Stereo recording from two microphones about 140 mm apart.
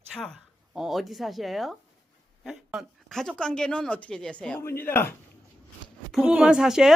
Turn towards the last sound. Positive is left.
turn(degrees=-5)  # may be behind; listen again after turning